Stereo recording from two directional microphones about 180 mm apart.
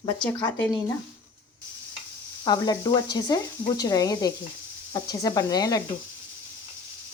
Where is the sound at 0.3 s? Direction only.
15° left (ahead or behind).